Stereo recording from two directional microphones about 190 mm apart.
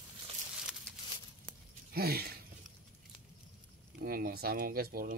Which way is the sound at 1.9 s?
55° right (ahead or behind).